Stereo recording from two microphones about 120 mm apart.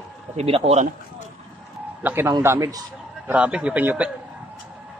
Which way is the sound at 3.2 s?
10° right (ahead or behind).